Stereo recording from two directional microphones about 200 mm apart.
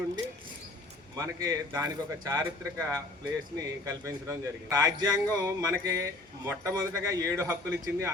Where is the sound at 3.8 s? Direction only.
15° right (ahead or behind).